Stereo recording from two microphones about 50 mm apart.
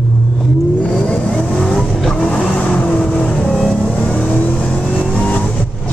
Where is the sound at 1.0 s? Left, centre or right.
Centre.